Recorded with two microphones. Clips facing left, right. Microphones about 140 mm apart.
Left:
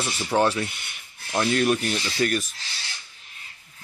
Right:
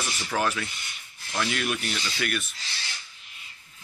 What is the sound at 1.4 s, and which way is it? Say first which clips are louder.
Rub: left 8 dB; 35° left (ahead or behind).